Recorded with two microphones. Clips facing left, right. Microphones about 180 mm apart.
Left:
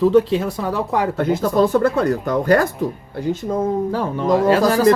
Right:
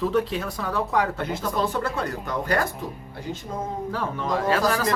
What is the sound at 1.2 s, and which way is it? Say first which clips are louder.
Speech: left 10 dB; 45° left (ahead or behind).